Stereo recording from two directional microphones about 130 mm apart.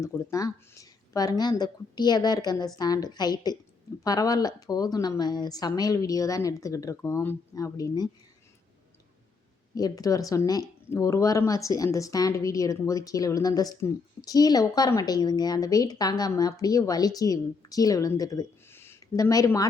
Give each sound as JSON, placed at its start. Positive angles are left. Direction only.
{"t": 0.0, "sound": "speech", "side_deg": 25}
{"t": 9.7, "sound": "speech", "side_deg": 30}